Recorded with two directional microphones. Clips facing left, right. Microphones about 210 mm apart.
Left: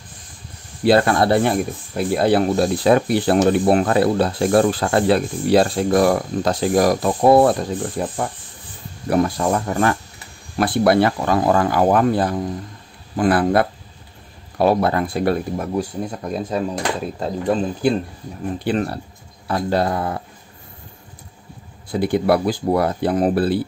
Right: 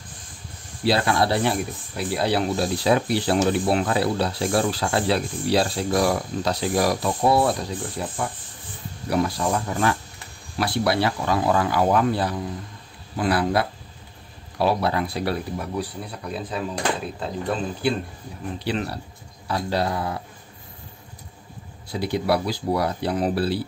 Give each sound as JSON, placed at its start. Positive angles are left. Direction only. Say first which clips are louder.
{"t": 0.8, "sound": "speech", "louder": "left 6 dB", "side_deg": 50}
{"t": 21.9, "sound": "speech", "louder": "left 6 dB", "side_deg": 50}